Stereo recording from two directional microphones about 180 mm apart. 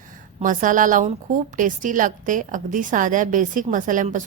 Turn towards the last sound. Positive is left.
turn(degrees=-45)  # may be behind; listen again after turning